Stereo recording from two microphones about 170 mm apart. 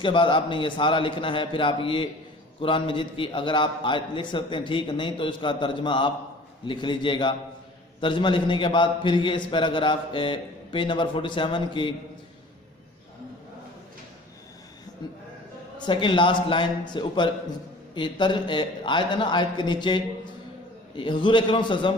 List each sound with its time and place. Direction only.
0.0 s a man's voice: 30° left (ahead or behind)
15.8 s a man's voice: 30° left (ahead or behind)